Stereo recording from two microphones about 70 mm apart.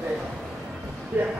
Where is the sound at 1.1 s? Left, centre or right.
Right.